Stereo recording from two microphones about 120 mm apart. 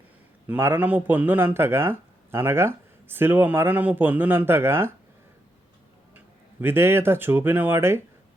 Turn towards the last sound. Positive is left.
turn(degrees=-20)  # may be behind; listen again after turning